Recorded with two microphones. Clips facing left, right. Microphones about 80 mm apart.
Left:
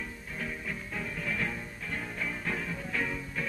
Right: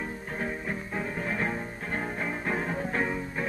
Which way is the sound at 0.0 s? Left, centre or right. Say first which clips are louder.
Right 6 dB; right.